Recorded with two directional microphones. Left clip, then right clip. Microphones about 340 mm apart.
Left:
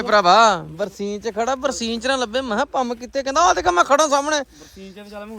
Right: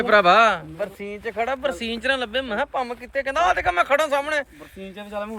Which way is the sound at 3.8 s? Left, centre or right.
Centre.